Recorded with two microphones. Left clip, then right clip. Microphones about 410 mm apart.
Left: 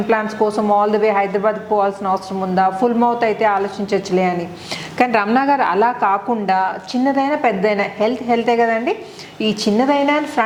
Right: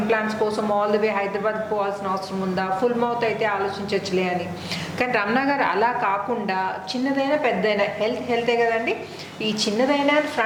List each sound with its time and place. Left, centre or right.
0.1 s a man's voice: left